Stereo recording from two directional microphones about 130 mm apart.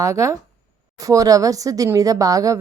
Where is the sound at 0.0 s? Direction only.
25° right (ahead or behind).